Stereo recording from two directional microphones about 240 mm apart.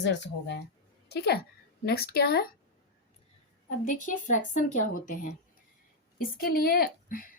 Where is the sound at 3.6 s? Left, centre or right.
Left.